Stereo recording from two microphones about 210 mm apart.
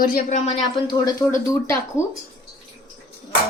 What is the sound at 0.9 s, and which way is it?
Speech, 15° left (ahead or behind).